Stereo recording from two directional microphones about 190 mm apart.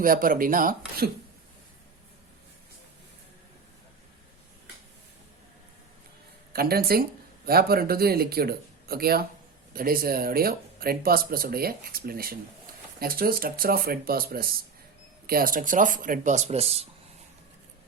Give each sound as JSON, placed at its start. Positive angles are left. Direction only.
{"t": 0.0, "sound": "speech", "side_deg": -45}
{"t": 6.5, "sound": "speech", "side_deg": -55}